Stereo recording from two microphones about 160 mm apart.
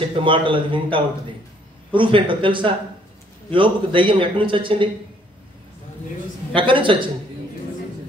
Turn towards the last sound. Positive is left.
turn(degrees=-30)  # may be behind; listen again after turning